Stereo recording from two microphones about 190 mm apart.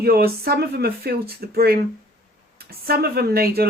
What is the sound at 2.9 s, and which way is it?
Speech, 55° right (ahead or behind).